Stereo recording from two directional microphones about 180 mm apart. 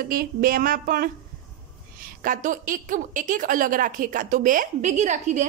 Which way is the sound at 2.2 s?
45° right (ahead or behind).